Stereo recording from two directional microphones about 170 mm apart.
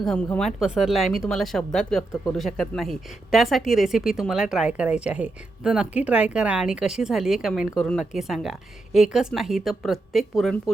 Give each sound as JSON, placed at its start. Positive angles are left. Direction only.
{"t": 0.0, "sound": "a woman's voice", "side_deg": 5}